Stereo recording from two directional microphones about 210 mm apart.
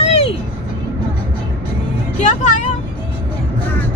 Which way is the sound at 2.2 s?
35° left (ahead or behind).